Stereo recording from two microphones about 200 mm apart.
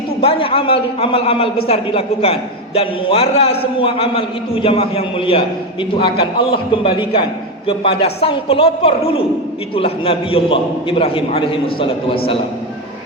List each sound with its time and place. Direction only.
0.2 s a man's voice: 30° left (ahead or behind)